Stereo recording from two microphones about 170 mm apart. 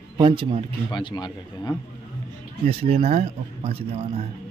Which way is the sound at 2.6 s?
40° right (ahead or behind).